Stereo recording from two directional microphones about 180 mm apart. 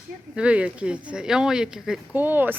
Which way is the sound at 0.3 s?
5° right (ahead or behind).